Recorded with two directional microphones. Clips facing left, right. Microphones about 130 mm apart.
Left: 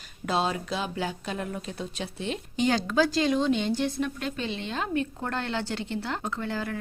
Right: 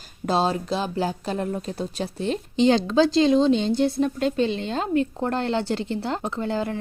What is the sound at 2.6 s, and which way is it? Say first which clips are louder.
Speech: right 6 dB; 25° right (ahead or behind).